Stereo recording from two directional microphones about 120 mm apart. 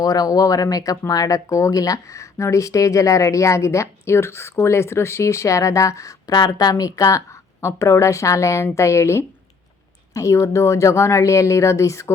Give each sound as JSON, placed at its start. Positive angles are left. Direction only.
{"t": 0.0, "sound": "speech", "side_deg": 30}